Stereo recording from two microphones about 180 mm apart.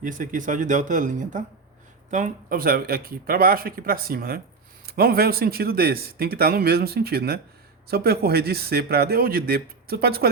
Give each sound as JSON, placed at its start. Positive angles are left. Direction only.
{"t": 0.0, "sound": "speech", "side_deg": -45}